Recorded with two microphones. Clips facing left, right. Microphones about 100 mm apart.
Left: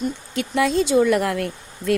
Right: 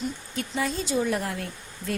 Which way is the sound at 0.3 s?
85° left.